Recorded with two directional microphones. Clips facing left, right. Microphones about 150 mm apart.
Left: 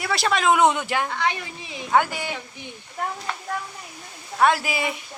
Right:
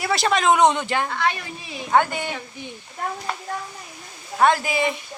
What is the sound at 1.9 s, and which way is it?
Speech, 5° left (ahead or behind).